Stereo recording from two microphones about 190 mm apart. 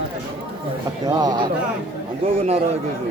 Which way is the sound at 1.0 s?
20° right (ahead or behind).